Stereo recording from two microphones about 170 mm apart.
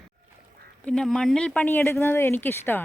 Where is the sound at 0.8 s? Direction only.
5° left (ahead or behind).